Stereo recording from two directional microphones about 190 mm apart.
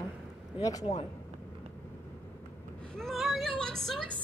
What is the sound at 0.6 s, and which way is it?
Speech, 20° left (ahead or behind).